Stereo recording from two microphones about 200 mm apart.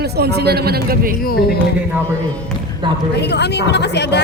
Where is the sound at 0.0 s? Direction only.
55° right (ahead or behind).